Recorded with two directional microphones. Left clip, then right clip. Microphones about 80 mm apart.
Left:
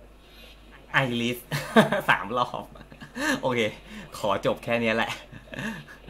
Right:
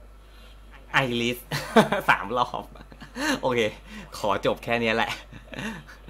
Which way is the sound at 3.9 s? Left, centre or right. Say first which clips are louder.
Right 1 dB; right.